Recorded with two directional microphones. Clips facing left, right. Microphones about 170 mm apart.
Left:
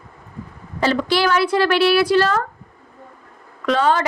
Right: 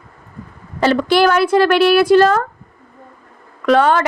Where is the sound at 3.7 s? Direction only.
60° right (ahead or behind).